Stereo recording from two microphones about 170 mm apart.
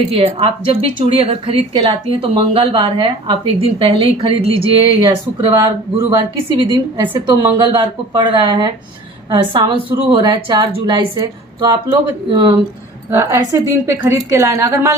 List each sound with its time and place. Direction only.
0.2 s a woman's voice: 35° right (ahead or behind); by 14.9 s 15° right (ahead or behind)